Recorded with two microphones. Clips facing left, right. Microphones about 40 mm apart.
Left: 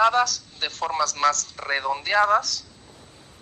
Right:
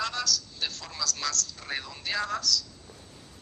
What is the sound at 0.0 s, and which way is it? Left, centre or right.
A man's voice, left.